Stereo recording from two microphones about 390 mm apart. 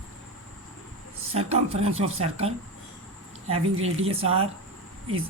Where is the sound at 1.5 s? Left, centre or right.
Centre.